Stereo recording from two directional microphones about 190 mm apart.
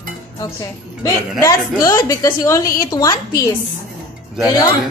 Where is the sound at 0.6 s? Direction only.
15° left (ahead or behind).